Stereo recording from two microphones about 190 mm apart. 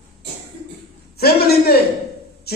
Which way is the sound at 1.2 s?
55° left (ahead or behind).